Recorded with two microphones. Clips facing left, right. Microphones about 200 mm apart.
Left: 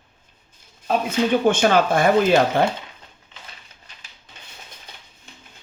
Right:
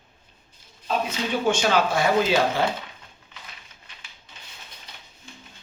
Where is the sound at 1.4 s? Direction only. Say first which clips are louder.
Left 1 dB; 55° left (ahead or behind).